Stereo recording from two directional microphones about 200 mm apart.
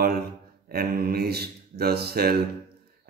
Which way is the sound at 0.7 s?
50° right (ahead or behind).